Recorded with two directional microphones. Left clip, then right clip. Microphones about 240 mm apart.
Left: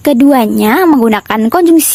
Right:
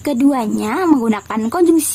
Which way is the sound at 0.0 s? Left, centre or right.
Left.